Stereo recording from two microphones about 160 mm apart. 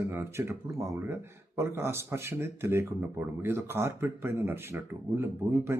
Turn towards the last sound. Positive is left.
turn(degrees=-15)  # may be behind; listen again after turning